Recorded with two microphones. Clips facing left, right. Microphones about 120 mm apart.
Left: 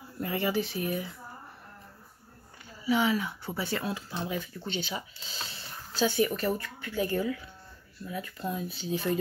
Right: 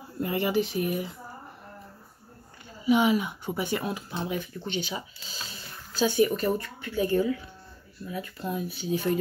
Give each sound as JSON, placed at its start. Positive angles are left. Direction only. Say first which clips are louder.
{"t": 0.2, "sound": "speech", "louder": "right 3 dB", "side_deg": -15}
{"t": 2.8, "sound": "speech", "louder": "right 4 dB", "side_deg": -20}